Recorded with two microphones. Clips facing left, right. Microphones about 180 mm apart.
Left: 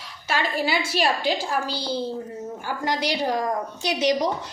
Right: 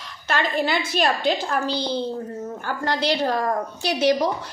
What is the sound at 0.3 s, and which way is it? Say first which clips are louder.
A woman's voice: right 2 dB; 5° left (ahead or behind).